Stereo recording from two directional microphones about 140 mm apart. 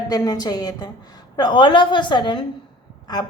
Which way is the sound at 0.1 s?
30° left (ahead or behind).